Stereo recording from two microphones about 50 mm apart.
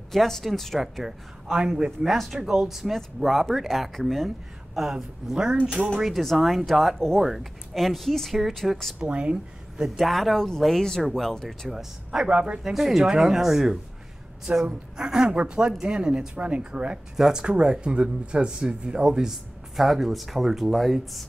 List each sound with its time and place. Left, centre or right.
0.1 s speech: centre
1.9 s speech: centre
2.4 s a woman's voice: centre
3.2 s a woman's voice: centre
6.0 s speech: centre
8.7 s a woman's voice: centre
9.0 s speech: right
9.8 s speech: centre
11.7 s a woman's voice: centre
12.7 s a woman's voice: centre
19.8 s speech: centre